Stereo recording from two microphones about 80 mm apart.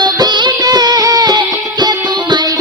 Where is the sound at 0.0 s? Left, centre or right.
Right.